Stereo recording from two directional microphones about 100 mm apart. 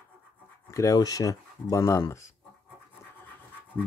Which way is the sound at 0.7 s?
35° left (ahead or behind).